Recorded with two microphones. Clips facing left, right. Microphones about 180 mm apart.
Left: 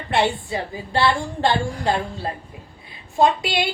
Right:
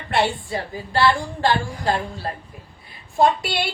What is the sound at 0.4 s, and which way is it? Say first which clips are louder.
A woman's voice: left 1 dB; 20° left (ahead or behind).